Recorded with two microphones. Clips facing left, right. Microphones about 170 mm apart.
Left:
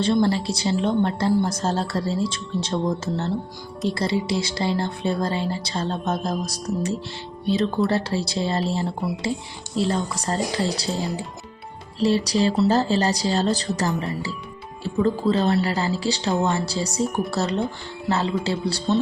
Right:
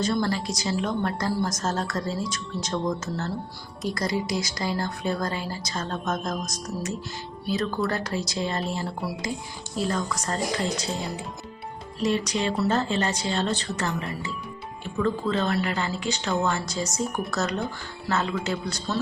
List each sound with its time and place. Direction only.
0.0 s a woman's voice: 30° left (ahead or behind)
15.0 s speech: 35° left (ahead or behind)